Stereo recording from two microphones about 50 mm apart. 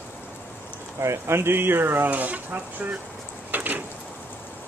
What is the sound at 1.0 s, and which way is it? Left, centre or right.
Speech, right.